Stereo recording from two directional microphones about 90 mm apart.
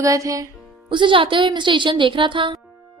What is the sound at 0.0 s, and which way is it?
Music, 40° right (ahead or behind).